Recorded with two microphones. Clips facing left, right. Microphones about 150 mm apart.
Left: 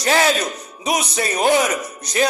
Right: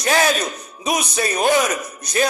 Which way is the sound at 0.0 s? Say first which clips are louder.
Left 1 dB; 25° left (ahead or behind).